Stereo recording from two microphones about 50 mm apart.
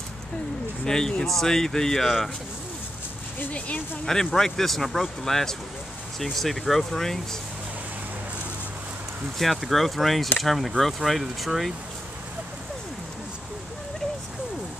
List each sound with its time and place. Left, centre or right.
0.8 s speech: centre
3.5 s speech: left
4.0 s speech: centre
9.4 s speech: centre